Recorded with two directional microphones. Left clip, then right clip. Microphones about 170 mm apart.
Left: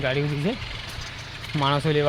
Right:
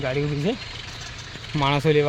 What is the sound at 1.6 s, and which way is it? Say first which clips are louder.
Speech: right 3 dB; 30° right (ahead or behind).